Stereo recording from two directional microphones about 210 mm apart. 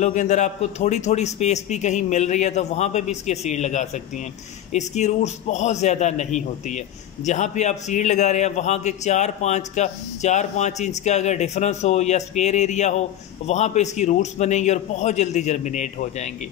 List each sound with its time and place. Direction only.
0.0 s a man's voice: 35° left (ahead or behind)